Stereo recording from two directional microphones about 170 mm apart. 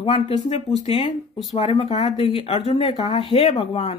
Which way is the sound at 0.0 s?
35° left (ahead or behind).